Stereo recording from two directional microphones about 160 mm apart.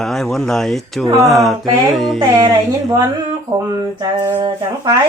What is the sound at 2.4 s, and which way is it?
Speech, 25° right (ahead or behind).